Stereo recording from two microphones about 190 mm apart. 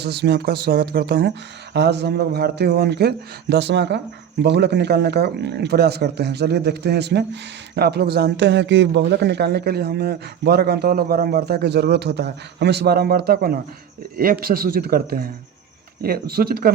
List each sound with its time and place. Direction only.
0.0 s a man's voice: 60° right (ahead or behind)